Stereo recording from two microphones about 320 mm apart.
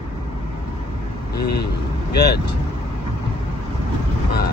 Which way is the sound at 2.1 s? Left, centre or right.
Left.